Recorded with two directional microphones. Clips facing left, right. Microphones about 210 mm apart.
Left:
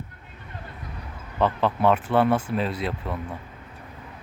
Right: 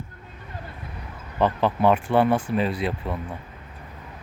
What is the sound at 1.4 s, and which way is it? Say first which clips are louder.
Speech: right 1 dB; centre (ahead or behind).